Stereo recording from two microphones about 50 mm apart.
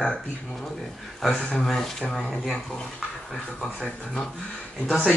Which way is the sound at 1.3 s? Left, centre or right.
Centre.